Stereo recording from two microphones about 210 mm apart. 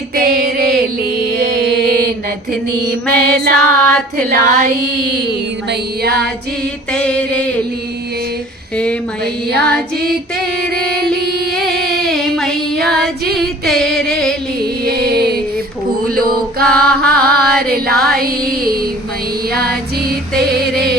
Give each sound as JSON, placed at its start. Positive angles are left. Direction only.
{"t": 0.2, "sound": "a sound", "side_deg": -45}
{"t": 1.0, "sound": "music", "side_deg": -50}
{"t": 3.1, "sound": "a sound", "side_deg": -45}
{"t": 3.5, "sound": "music", "side_deg": 5}
{"t": 6.1, "sound": "music", "side_deg": 5}
{"t": 8.8, "sound": "music", "side_deg": 5}
{"t": 10.6, "sound": "music", "side_deg": -45}
{"t": 12.0, "sound": "female singing", "side_deg": 0}
{"t": 14.8, "sound": "music", "side_deg": -50}
{"t": 16.8, "sound": "music", "side_deg": 5}
{"t": 17.1, "sound": "a sound", "side_deg": -45}
{"t": 17.9, "sound": "music", "side_deg": 0}
{"t": 18.2, "sound": "a sound", "side_deg": -45}